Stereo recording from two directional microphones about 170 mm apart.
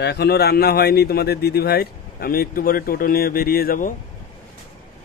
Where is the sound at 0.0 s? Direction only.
75° left (ahead or behind); by 3.9 s 60° left (ahead or behind).